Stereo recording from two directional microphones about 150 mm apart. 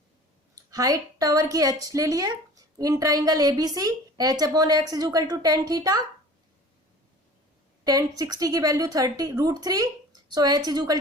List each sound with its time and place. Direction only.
0.7 s a woman's voice: 25° right (ahead or behind)
7.9 s a woman's voice: 25° right (ahead or behind)